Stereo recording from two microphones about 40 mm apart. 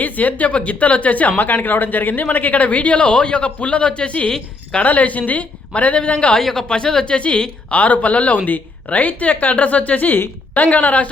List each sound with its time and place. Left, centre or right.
0.0 s speech: left
1.4 s speech: left
6.4 s speech: centre
6.7 s a woman's voice: left
7.7 s speech: left